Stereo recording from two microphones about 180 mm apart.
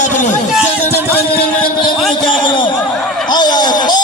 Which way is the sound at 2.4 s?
25° left (ahead or behind).